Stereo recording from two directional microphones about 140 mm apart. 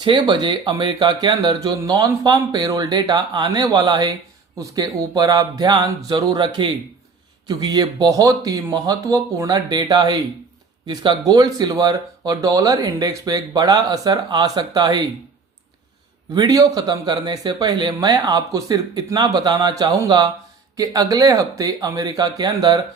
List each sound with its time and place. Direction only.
0.0 s speech: 35° right (ahead or behind)
16.3 s speech: 30° right (ahead or behind)